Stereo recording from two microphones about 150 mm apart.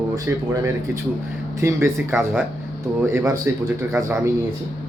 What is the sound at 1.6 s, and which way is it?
Speech, 15° right (ahead or behind).